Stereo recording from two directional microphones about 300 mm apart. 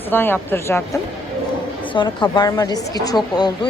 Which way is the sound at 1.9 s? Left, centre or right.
Centre.